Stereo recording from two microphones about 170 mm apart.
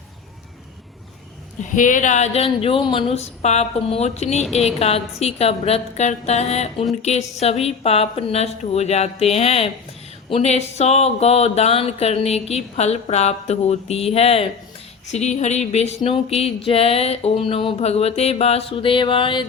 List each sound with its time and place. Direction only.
1.7 s speech: 50° left (ahead or behind); by 19.5 s 30° left (ahead or behind)